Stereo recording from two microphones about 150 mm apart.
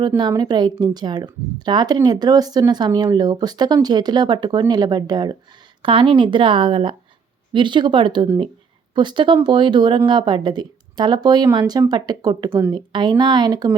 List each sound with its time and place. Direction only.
0.2 s a woman's voice: 25° right (ahead or behind)
12.5 s a woman's voice: 15° right (ahead or behind)
12.7 s a woman's voice: 30° right (ahead or behind)